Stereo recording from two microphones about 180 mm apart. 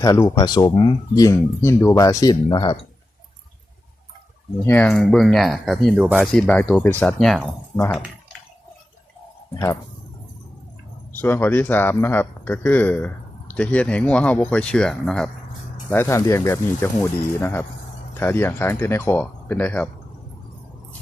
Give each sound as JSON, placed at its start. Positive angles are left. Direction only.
{"t": 0.0, "sound": "speech", "side_deg": 20}
{"t": 4.6, "sound": "speech", "side_deg": 10}
{"t": 11.1, "sound": "speech", "side_deg": 10}